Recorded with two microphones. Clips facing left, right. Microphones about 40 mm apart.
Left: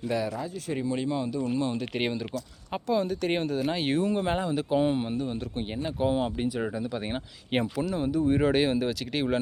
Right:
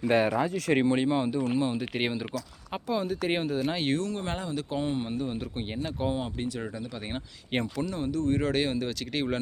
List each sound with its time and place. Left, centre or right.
0.1 s speech: right
0.3 s speech: right
0.9 s speech: right
1.5 s speech: centre
3.9 s speech: centre
5.0 s speech: centre
6.1 s speech: centre